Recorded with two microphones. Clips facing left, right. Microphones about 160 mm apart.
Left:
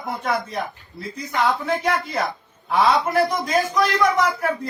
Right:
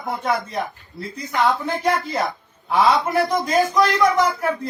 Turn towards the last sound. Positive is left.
turn(degrees=0)  # may be behind; listen again after turning